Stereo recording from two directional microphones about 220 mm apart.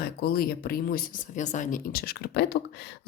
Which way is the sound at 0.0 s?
45° left (ahead or behind).